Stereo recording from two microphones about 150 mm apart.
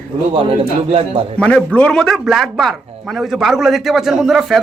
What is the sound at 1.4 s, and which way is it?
Speech, 5° left (ahead or behind).